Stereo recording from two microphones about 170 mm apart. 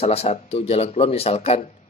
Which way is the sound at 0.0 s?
40° left (ahead or behind).